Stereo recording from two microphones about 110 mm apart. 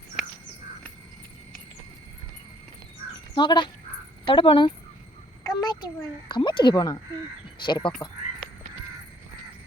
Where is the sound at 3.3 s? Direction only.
45° left (ahead or behind).